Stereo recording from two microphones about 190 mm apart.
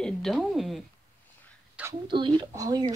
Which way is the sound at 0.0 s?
Centre (ahead or behind).